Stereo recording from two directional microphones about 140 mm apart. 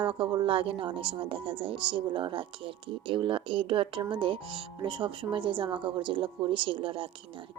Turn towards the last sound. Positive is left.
turn(degrees=-40)  # may be behind; listen again after turning